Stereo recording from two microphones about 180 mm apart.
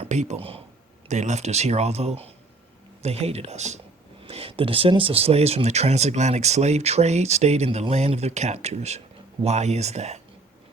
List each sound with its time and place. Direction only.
0.0 s speech: 40° right (ahead or behind)